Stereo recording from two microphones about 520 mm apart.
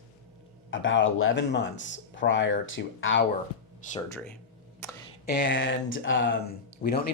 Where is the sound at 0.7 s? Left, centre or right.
Left.